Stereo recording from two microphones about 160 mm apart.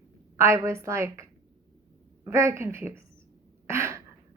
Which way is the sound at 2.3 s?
15° right (ahead or behind).